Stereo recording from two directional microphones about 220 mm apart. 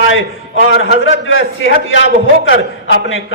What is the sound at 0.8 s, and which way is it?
A man's voice, 60° left (ahead or behind).